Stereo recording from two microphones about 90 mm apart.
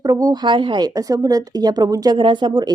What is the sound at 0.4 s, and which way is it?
A woman's voice, 65° right (ahead or behind).